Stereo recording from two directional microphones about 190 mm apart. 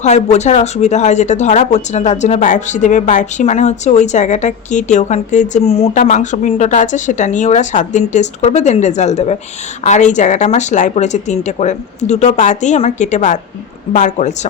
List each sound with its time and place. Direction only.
0.0 s speech: 35° left (ahead or behind)